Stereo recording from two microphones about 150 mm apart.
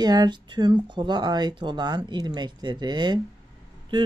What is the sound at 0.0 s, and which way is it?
Speech, 25° right (ahead or behind).